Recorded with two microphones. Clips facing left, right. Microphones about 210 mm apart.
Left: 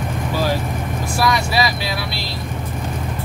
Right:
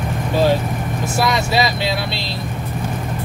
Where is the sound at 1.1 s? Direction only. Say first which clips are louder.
Right 1 dB; 25° right (ahead or behind).